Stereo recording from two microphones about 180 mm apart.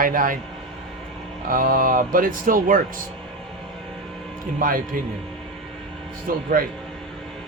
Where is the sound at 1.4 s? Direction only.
50° right (ahead or behind).